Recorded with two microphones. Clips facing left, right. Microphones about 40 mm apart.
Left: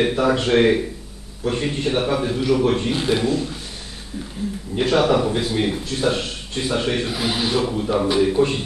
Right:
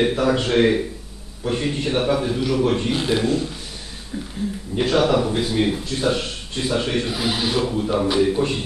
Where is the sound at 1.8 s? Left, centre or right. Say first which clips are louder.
Even; centre.